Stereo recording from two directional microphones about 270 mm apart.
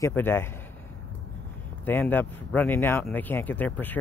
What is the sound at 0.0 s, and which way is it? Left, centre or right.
Speech, centre.